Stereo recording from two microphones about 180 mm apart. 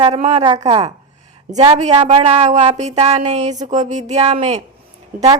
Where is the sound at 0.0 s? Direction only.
40° right (ahead or behind).